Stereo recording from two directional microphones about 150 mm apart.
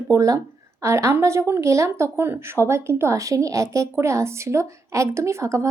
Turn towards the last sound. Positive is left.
turn(degrees=-20)  # may be behind; listen again after turning